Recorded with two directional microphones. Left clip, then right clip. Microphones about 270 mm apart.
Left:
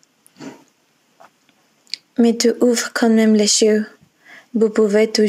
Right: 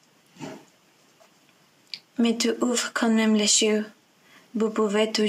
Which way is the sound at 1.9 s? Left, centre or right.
Left.